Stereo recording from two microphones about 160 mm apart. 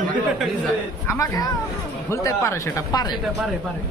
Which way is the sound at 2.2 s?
20° left (ahead or behind).